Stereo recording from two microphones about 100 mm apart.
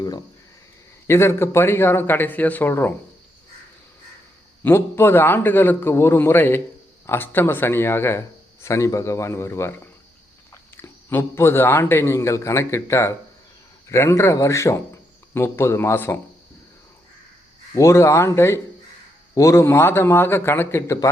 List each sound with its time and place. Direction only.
0.0 s speech: 40° left (ahead or behind)
1.0 s a man's voice: 25° left (ahead or behind)
4.6 s a man's voice: 25° left (ahead or behind)
17.7 s a man's voice: 30° left (ahead or behind)